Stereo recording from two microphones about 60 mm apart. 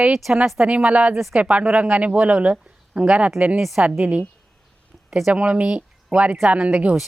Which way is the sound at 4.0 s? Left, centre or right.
Right.